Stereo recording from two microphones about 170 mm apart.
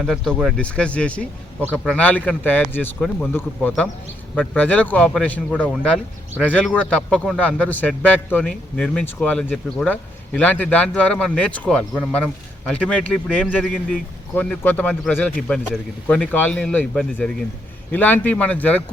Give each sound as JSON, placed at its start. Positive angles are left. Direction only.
{"t": 0.0, "sound": "a man's voice", "side_deg": 0}